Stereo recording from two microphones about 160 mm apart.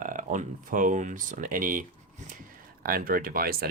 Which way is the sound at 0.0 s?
55° right (ahead or behind).